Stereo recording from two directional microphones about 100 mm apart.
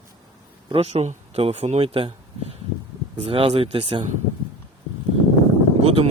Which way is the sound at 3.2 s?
70° right (ahead or behind).